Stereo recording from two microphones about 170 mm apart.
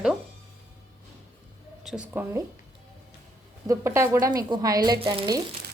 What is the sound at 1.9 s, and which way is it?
Speech, 5° right (ahead or behind).